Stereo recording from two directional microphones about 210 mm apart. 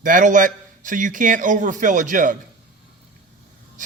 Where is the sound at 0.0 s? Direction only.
40° right (ahead or behind).